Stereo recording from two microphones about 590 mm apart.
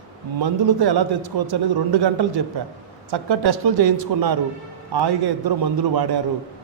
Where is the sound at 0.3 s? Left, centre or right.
Right.